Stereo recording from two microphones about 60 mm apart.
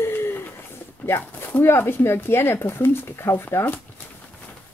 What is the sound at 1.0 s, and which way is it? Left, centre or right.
Speech, left.